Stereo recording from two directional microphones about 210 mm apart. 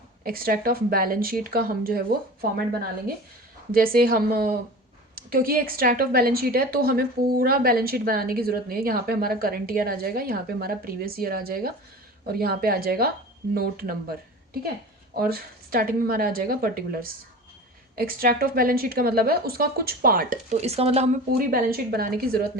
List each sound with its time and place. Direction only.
0.3 s a woman's voice: 45° right (ahead or behind)
3.7 s a woman's voice: 45° right (ahead or behind)